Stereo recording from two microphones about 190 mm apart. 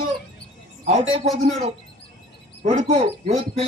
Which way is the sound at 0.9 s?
35° right (ahead or behind).